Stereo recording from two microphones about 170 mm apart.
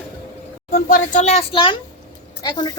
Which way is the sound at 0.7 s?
55° left (ahead or behind).